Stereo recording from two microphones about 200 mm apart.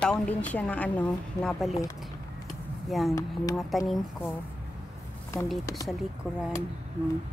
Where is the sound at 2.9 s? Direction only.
Centre (ahead or behind).